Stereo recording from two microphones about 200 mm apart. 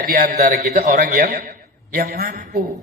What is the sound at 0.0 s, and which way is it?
Speech, 45° right (ahead or behind).